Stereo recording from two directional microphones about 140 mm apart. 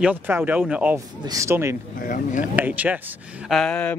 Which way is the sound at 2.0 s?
75° left (ahead or behind).